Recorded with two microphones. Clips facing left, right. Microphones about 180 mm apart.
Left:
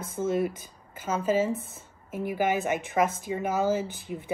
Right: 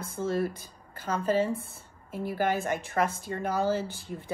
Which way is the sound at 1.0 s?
5° left (ahead or behind).